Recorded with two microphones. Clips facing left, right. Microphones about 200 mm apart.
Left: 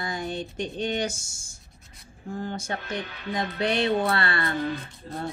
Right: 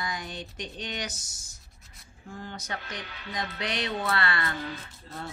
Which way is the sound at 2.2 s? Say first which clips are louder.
Left 8 dB; 45° left (ahead or behind).